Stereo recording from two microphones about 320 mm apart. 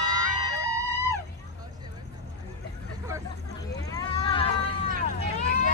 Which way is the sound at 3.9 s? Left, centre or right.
Centre.